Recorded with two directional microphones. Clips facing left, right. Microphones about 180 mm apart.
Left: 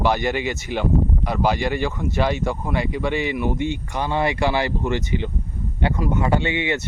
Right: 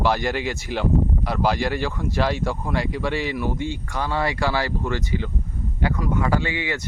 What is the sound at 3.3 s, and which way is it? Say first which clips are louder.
Speech: left 3 dB; 20° left (ahead or behind).